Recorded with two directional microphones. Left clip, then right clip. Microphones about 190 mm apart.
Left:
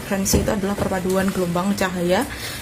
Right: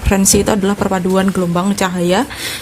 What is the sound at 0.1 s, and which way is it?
A woman's voice, 40° right (ahead or behind).